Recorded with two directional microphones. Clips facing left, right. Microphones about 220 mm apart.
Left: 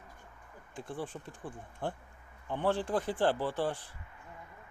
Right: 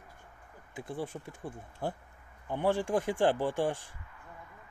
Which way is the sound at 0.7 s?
10° right (ahead or behind).